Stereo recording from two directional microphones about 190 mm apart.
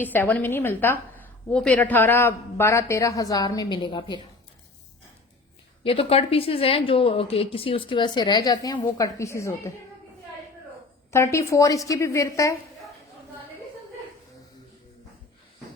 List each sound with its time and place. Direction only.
0.0 s a woman's voice: 10° left (ahead or behind)
5.8 s a woman's voice: 30° left (ahead or behind)
11.1 s a woman's voice: 15° left (ahead or behind)